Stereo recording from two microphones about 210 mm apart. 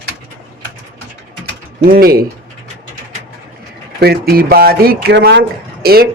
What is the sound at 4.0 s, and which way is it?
Speech, 50° right (ahead or behind).